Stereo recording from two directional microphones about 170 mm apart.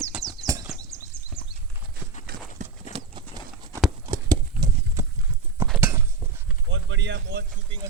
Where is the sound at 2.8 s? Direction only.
35° right (ahead or behind).